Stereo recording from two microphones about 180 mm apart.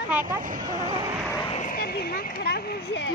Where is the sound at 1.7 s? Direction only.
55° left (ahead or behind); by 3.1 s 75° left (ahead or behind).